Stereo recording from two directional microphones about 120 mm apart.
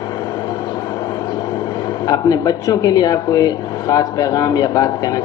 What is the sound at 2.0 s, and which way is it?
Speech, 30° left (ahead or behind).